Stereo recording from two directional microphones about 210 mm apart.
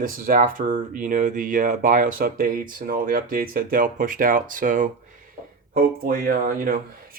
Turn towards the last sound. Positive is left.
turn(degrees=-40)  # may be behind; listen again after turning